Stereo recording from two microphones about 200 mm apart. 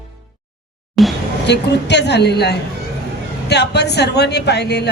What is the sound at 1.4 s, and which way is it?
A man's voice, 60° left (ahead or behind).